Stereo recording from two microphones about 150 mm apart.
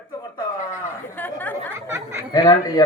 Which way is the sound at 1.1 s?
10° left (ahead or behind).